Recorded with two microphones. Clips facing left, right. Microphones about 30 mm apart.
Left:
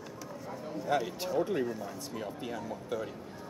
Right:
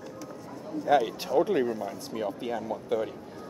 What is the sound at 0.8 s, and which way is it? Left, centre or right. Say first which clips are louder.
Speech: right 7 dB; centre.